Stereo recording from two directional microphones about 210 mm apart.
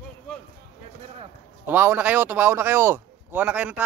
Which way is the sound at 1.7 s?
10° right (ahead or behind).